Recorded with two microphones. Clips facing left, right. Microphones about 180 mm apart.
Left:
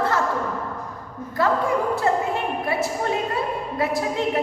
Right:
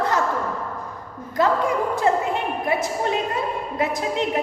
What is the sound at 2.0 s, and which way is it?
A woman's voice, 20° right (ahead or behind).